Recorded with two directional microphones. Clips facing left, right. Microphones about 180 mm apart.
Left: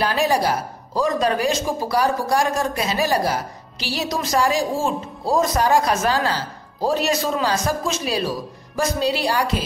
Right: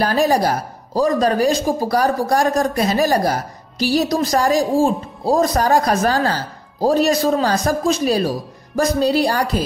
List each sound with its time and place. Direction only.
0.0 s speech: 40° right (ahead or behind)